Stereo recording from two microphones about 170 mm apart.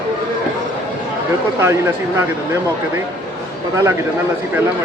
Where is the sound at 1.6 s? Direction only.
15° right (ahead or behind).